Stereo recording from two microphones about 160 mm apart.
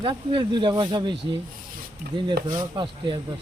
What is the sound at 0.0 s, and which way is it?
Speech, 30° right (ahead or behind).